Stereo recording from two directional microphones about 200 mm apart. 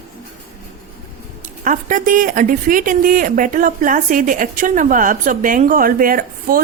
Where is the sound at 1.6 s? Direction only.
40° right (ahead or behind).